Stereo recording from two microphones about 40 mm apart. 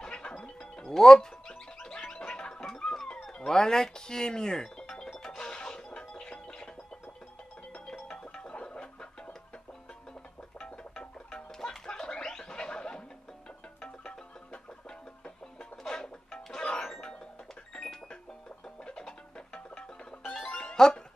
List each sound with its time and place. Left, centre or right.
0.0 s music: left
8.1 s a sound: left
10.6 s music: centre
15.9 s music: centre
18.9 s music: left